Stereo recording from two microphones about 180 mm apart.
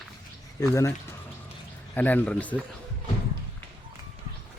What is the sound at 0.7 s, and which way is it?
Speech, 15° left (ahead or behind).